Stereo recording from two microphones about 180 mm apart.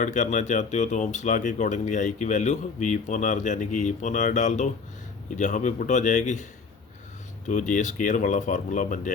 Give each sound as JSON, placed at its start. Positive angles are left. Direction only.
{"t": 0.0, "sound": "speech", "side_deg": 40}